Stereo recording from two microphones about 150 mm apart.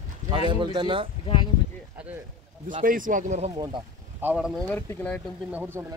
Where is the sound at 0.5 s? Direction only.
30° right (ahead or behind).